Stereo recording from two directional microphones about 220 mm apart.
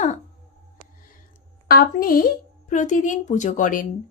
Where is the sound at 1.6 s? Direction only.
45° left (ahead or behind).